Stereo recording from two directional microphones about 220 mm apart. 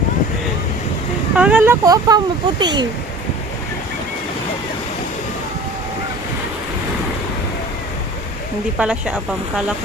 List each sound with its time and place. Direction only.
1.4 s a child's voice: 5° right (ahead or behind)
8.8 s speech: 5° right (ahead or behind)